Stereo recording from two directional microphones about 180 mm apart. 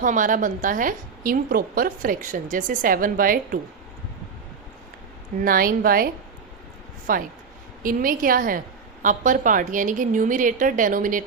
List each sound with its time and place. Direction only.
0.0 s a woman's voice: 45° right (ahead or behind)
5.4 s a woman's voice: 50° right (ahead or behind)
7.1 s a woman's voice: 50° right (ahead or behind)